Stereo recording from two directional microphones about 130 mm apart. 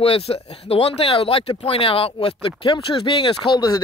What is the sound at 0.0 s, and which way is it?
Speech, 45° left (ahead or behind).